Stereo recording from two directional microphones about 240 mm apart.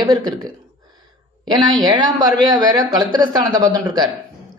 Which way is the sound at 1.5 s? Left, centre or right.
Centre.